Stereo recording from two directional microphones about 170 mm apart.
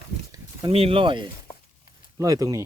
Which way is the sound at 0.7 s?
35° right (ahead or behind).